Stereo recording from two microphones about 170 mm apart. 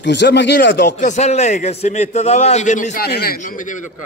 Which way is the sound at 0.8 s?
45° left (ahead or behind).